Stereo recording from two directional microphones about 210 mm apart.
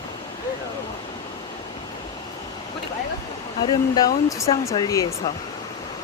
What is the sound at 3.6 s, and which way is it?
Speech, 15° left (ahead or behind).